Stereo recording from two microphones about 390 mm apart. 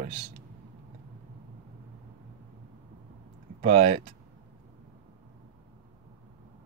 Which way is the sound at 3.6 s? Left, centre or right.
Right.